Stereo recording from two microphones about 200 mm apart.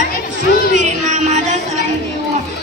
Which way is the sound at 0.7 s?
35° right (ahead or behind).